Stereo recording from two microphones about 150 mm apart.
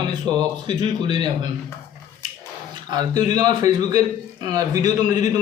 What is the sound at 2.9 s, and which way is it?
Speech, 25° right (ahead or behind).